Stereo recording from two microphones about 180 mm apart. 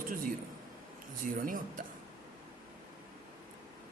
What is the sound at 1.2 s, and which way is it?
Speech, 50° right (ahead or behind).